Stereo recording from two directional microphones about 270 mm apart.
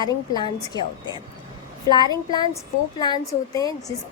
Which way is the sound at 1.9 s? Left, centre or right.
Centre.